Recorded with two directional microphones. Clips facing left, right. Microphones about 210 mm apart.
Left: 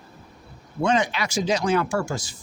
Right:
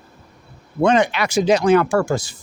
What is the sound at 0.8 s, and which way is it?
Speech, 60° right (ahead or behind).